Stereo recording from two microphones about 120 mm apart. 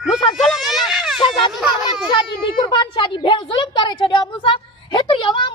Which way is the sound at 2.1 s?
45° left (ahead or behind).